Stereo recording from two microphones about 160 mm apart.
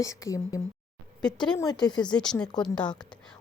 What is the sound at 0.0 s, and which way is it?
Speech, 20° left (ahead or behind).